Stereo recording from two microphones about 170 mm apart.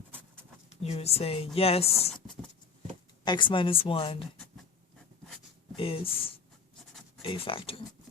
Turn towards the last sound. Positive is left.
turn(degrees=35)  # may be behind; listen again after turning